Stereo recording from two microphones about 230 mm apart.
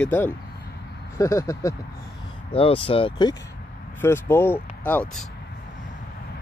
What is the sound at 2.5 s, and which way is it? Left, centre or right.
Speech, left.